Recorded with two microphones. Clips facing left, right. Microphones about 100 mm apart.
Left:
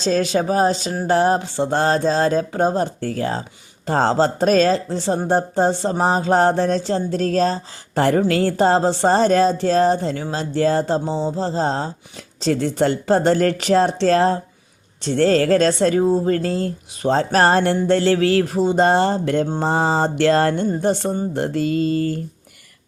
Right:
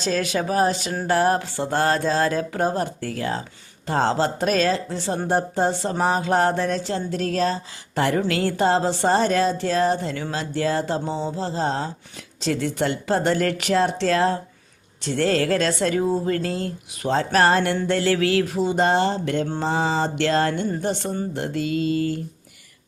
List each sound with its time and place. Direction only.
0.0 s speech: 30° left (ahead or behind)
19.6 s a sound: 45° left (ahead or behind)
20.8 s speech: 40° left (ahead or behind)